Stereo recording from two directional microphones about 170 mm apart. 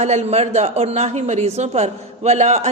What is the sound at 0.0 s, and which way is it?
A woman's voice, 40° right (ahead or behind).